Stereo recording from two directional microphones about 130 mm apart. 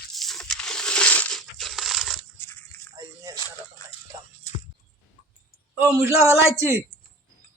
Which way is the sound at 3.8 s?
30° left (ahead or behind).